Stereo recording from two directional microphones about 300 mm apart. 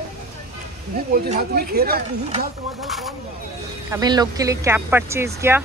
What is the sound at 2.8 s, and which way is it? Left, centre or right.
Speech, centre.